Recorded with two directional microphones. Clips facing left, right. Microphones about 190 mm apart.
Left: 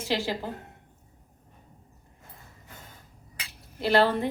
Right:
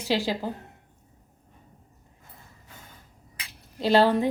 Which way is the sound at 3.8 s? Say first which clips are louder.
Right 3 dB; 15° right (ahead or behind).